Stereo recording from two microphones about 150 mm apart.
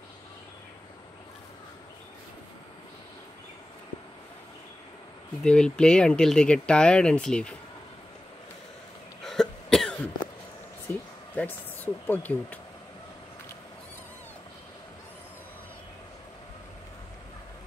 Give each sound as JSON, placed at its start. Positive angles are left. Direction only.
{"t": 5.4, "sound": "speech", "side_deg": 5}
{"t": 9.2, "sound": "cough", "side_deg": 5}
{"t": 10.9, "sound": "a sound", "side_deg": 10}